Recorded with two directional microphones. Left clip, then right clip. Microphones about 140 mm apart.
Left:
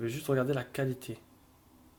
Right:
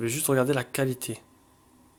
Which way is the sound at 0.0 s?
40° right (ahead or behind).